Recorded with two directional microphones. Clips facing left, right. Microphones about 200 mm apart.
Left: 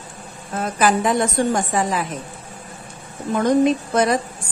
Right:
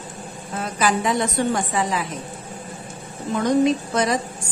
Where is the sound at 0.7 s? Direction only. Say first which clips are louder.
Left 3 dB; 50° left (ahead or behind).